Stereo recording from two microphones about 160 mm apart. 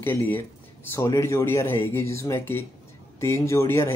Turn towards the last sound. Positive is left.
turn(degrees=15)  # may be behind; listen again after turning